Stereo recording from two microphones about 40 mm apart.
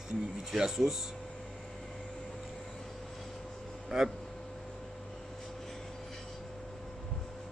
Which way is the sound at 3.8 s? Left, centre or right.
Centre.